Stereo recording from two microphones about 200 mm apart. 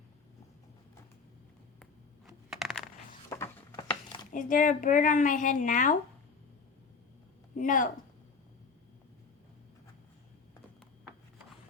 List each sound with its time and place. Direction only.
2.2 s coin: centre (ahead or behind)
3.2 s a sound: 15° left (ahead or behind)
4.3 s speech: 40° left (ahead or behind)
7.5 s a woman's voice: 40° left (ahead or behind)